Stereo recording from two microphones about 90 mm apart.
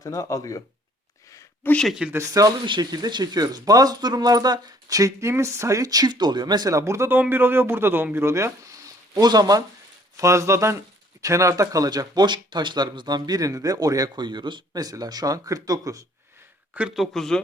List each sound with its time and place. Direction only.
0.0 s speech: 40° left (ahead or behind)
1.6 s speech: 25° left (ahead or behind)
2.1 s speech: 40° right (ahead or behind)
2.9 s speech: 50° right (ahead or behind)
10.2 s speech: 35° right (ahead or behind)
16.9 s speech: centre (ahead or behind)